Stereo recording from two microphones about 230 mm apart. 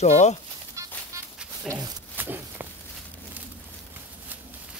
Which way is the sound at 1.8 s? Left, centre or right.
Centre.